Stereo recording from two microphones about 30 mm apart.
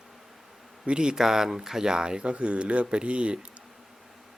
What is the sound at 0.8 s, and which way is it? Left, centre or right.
Speech, right.